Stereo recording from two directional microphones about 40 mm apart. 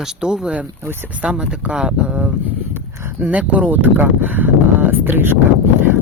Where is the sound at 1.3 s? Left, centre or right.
Right.